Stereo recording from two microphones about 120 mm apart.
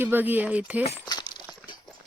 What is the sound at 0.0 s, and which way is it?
Speech, 15° right (ahead or behind).